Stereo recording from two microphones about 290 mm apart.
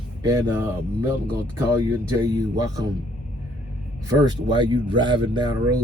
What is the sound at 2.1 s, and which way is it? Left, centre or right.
Speech, centre.